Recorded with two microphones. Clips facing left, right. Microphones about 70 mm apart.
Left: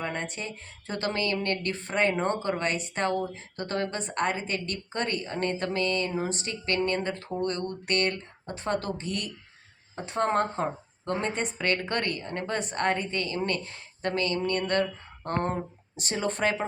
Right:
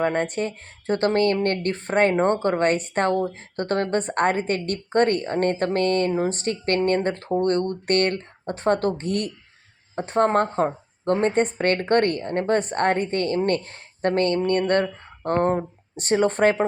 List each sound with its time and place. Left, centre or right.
0.0 s speech: right